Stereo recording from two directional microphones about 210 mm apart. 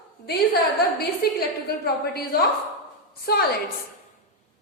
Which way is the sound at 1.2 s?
45° left (ahead or behind).